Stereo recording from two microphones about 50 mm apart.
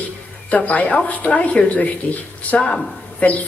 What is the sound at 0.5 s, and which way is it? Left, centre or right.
Speech, left.